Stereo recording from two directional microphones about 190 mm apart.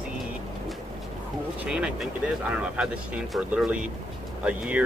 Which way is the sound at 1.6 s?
5° right (ahead or behind).